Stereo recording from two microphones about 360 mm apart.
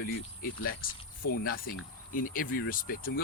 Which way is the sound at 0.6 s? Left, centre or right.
Left.